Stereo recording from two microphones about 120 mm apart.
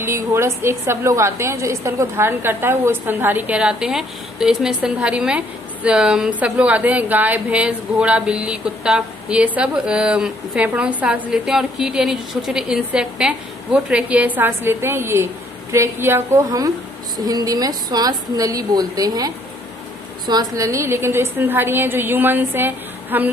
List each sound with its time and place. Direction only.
0.0 s a woman's voice: 20° right (ahead or behind)